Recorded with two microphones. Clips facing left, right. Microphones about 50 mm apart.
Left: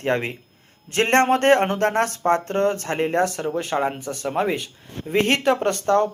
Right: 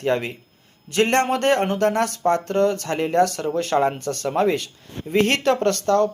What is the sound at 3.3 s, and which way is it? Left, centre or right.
A man's voice, centre.